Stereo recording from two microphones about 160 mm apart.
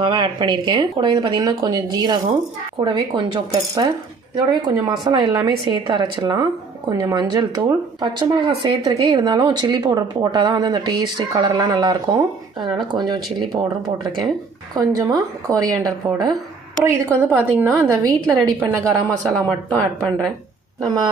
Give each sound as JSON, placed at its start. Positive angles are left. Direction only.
{"t": 0.0, "sound": "a woman's voice", "side_deg": -30}
{"t": 19.3, "sound": "speech", "side_deg": 5}
{"t": 20.8, "sound": "a woman's voice", "side_deg": -25}